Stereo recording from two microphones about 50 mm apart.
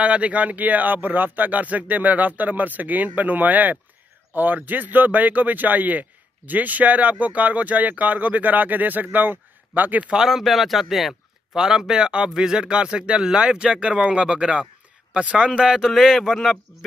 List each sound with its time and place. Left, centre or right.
0.0 s speech: right
10.1 s speech: centre; by 15.6 s right
15.8 s speech: centre
16.2 s speech: centre